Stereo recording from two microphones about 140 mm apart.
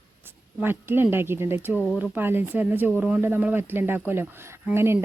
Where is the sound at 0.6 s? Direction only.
15° right (ahead or behind).